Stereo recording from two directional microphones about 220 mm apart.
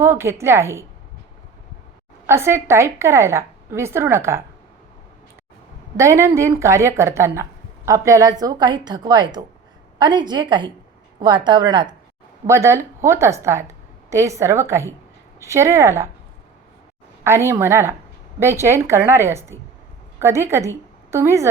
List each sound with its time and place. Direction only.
0.0 s a woman's voice: 10° right (ahead or behind)
2.2 s a woman's voice: 10° right (ahead or behind)
6.0 s a woman's voice: 15° right (ahead or behind)
17.2 s a woman's voice: 10° right (ahead or behind)